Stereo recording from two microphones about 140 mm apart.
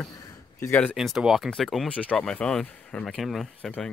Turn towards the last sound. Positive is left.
turn(degrees=5)  # may be behind; listen again after turning